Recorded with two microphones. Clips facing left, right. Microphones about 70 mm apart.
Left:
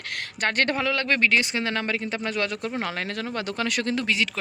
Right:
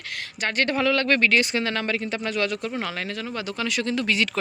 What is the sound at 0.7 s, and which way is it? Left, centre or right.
Speech, centre.